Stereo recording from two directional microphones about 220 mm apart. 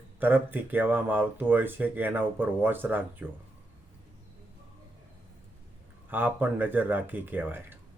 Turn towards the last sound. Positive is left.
turn(degrees=-10)  # may be behind; listen again after turning